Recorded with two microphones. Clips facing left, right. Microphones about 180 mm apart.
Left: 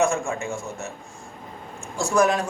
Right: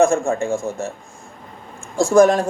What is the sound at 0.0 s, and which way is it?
Speech, 45° right (ahead or behind).